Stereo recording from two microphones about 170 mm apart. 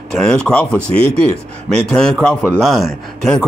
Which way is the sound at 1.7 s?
5° left (ahead or behind).